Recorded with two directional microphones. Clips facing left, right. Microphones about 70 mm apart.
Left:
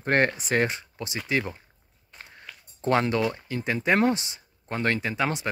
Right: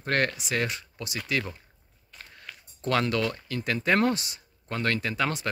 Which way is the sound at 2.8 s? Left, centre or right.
Left.